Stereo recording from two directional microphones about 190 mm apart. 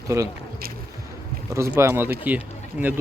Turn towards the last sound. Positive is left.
turn(degrees=-10)  # may be behind; listen again after turning